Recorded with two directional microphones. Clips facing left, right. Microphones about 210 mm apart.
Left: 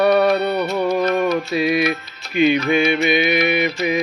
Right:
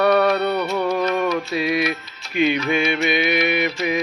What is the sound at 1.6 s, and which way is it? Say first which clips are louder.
Music: left 3 dB; 60° left (ahead or behind).